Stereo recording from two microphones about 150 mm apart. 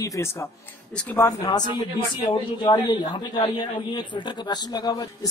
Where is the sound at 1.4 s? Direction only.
30° left (ahead or behind).